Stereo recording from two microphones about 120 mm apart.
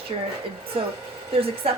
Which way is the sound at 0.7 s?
50° right (ahead or behind).